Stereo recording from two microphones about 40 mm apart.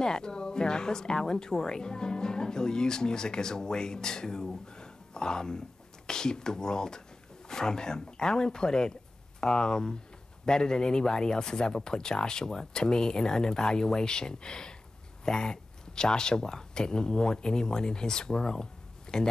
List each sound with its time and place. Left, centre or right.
0.0 s a woman's voice: centre